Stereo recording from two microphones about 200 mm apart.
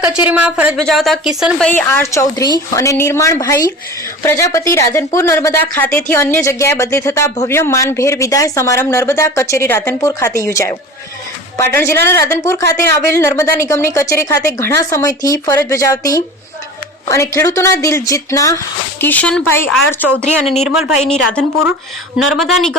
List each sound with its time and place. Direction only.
0.3 s speech: 5° right (ahead or behind); by 19.6 s 10° left (ahead or behind)
20.7 s speech: centre (ahead or behind)